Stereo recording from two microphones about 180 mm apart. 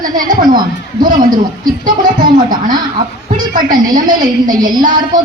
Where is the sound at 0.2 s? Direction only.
50° right (ahead or behind).